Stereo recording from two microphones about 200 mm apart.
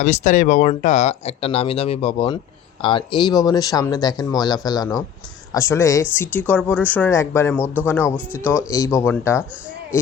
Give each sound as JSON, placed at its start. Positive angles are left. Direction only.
{"t": 0.0, "sound": "speech", "side_deg": 35}